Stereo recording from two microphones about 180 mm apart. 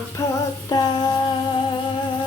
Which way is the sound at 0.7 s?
20° left (ahead or behind).